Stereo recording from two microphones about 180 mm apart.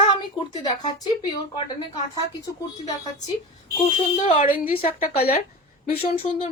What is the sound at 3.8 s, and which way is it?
Speech, 45° left (ahead or behind).